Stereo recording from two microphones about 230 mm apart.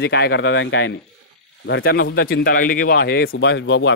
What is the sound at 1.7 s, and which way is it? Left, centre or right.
A man's voice, left.